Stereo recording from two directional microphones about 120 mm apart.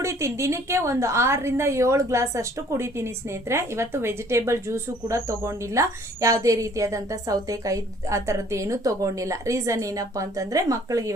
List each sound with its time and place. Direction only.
0.0 s a woman's voice: 25° right (ahead or behind)